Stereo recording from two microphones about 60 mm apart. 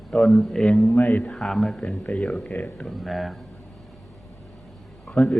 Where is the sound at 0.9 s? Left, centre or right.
Left.